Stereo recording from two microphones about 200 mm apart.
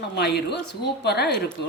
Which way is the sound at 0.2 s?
55° left (ahead or behind).